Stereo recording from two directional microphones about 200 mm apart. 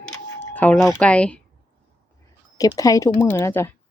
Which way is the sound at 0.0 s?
5° left (ahead or behind).